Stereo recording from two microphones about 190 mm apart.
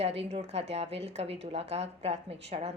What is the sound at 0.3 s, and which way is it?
A woman's voice, 35° right (ahead or behind).